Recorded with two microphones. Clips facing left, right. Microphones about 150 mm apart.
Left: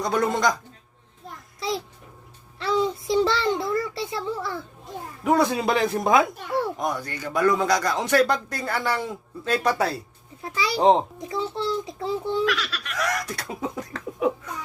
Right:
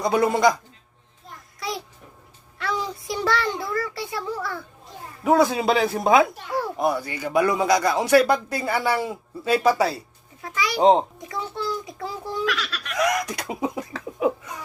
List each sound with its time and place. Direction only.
0.0 s speech: 10° right (ahead or behind)
1.5 s a sound: 25° left (ahead or behind)
2.6 s a child's voice: 25° left (ahead or behind)
5.2 s speech: centre (ahead or behind)
10.4 s a child's voice: 30° left (ahead or behind)
10.8 s speech: centre (ahead or behind)
11.2 s a child's voice: 25° left (ahead or behind)
12.5 s speech: centre (ahead or behind)
13.2 s speech: 15° right (ahead or behind)
13.9 s laughter: 5° right (ahead or behind)